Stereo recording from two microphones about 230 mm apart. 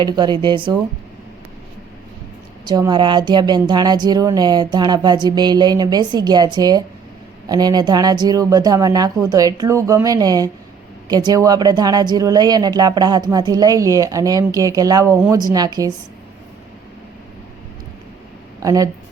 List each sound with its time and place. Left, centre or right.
0.0 s speech: centre
2.6 s speech: centre
18.6 s speech: centre